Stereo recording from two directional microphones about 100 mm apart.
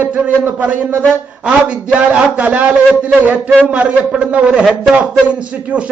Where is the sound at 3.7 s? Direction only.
10° right (ahead or behind).